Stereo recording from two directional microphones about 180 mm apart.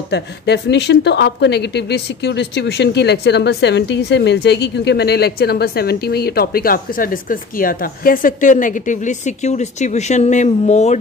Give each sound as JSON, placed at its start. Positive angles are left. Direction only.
{"t": 0.1, "sound": "a woman's voice", "side_deg": 70}